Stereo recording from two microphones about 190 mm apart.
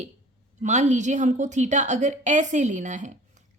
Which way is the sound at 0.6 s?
40° right (ahead or behind).